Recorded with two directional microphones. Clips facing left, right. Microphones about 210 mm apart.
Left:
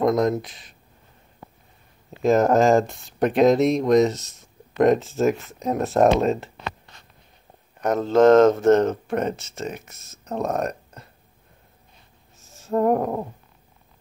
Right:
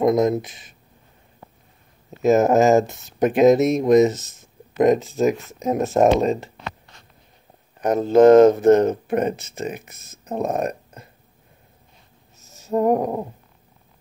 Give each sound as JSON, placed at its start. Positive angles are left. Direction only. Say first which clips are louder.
{"t": 0.0, "sound": "speech", "louder": "right 2 dB", "side_deg": -20}
{"t": 2.0, "sound": "speech", "louder": "right 2 dB", "side_deg": -5}
{"t": 6.0, "sound": "speech", "louder": "right 1 dB", "side_deg": -10}
{"t": 7.8, "sound": "speech", "louder": "right 3 dB", "side_deg": -15}
{"t": 12.6, "sound": "speech", "louder": "right 1 dB", "side_deg": -15}